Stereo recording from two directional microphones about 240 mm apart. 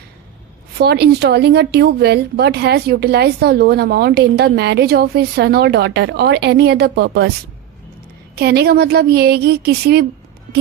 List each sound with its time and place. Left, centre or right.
0.8 s speech: right
8.4 s a woman's voice: right